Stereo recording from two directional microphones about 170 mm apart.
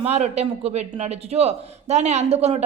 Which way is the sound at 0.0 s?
40° right (ahead or behind).